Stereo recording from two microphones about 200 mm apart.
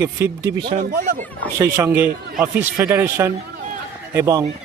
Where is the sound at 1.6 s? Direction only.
15° right (ahead or behind).